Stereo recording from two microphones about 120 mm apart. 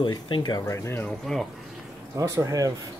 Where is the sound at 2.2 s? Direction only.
30° right (ahead or behind).